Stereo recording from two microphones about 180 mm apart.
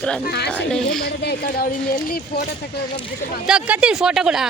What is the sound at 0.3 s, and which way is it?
Speech, 65° left (ahead or behind).